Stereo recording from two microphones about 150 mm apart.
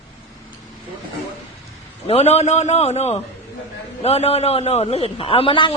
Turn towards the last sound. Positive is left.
turn(degrees=35)  # may be behind; listen again after turning